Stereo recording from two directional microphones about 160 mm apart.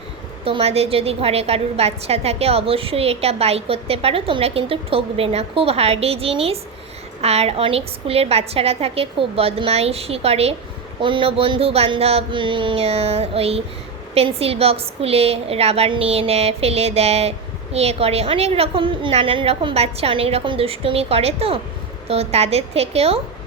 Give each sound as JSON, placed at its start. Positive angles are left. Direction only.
{"t": 0.4, "sound": "a woman's voice", "side_deg": -40}